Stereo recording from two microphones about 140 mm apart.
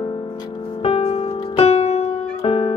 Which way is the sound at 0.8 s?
45° left (ahead or behind).